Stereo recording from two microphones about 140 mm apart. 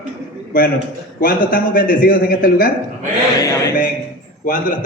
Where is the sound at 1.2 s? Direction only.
90° left.